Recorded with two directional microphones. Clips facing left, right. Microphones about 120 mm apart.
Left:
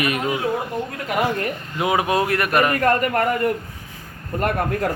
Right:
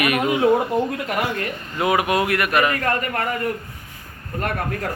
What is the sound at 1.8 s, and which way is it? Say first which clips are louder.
A man's voice: even; 25° left (ahead or behind).